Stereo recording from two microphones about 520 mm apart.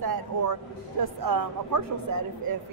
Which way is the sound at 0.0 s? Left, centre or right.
Right.